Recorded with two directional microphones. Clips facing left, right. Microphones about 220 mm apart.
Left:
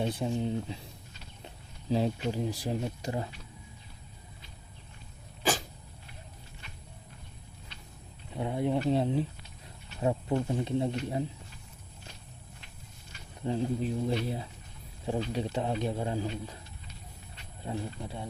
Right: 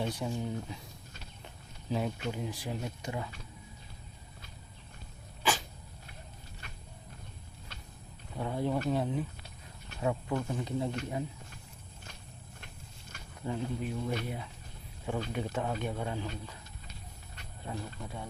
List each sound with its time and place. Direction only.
0.2 s speech: 25° left (ahead or behind)
1.9 s speech: 30° left (ahead or behind)
8.4 s speech: 20° left (ahead or behind)
13.4 s speech: 30° left (ahead or behind)
17.7 s speech: 25° left (ahead or behind)